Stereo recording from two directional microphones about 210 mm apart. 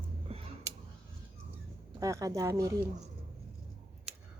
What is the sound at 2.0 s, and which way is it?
Speech, 15° right (ahead or behind).